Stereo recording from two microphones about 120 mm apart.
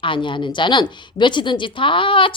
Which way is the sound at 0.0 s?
45° left (ahead or behind).